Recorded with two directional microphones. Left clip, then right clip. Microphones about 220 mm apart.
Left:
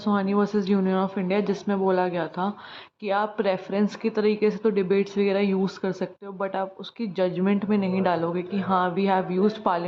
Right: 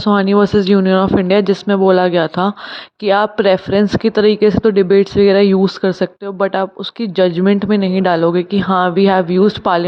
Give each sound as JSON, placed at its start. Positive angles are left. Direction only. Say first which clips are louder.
{"t": 0.0, "sound": "speech", "louder": "right 12 dB", "side_deg": -35}